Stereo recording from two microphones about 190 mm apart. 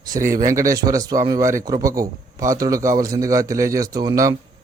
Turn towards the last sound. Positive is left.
turn(degrees=-15)  # may be behind; listen again after turning